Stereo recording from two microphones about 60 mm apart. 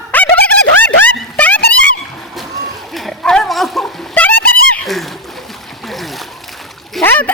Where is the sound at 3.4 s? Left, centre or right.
Centre.